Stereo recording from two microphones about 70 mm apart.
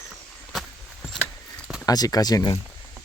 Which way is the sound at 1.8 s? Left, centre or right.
Left.